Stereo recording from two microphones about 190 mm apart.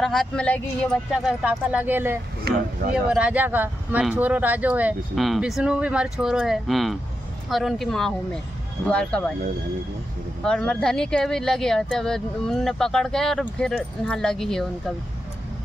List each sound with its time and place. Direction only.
0.0 s speech: centre (ahead or behind)
2.5 s speech: 60° right (ahead or behind)
2.9 s speech: 5° right (ahead or behind)
10.4 s speech: 5° left (ahead or behind)